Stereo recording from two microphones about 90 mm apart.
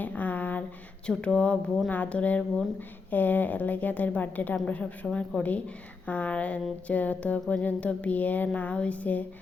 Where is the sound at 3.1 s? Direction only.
20° left (ahead or behind).